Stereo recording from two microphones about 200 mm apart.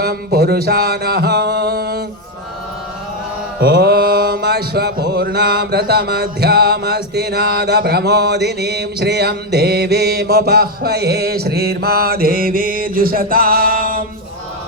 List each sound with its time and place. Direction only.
0.0 s music: 50° right (ahead or behind)
3.6 s music: 55° right (ahead or behind)